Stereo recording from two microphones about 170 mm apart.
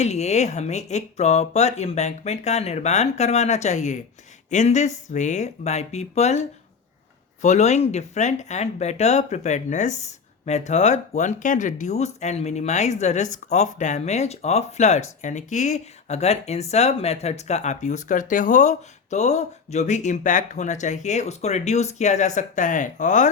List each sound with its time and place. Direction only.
0.0 s speech: 40° left (ahead or behind)
7.4 s speech: 45° left (ahead or behind)